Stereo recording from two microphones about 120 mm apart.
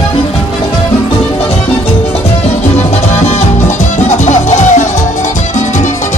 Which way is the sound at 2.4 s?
65° left (ahead or behind).